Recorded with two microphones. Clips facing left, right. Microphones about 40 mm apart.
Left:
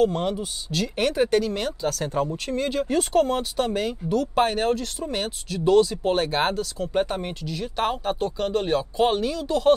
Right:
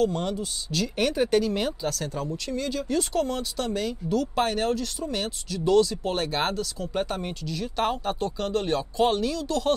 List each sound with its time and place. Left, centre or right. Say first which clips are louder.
0.0 s speech: left 3 dB; centre
2.1 s speech: left 5 dB; left
4.1 s speech: left 3 dB; centre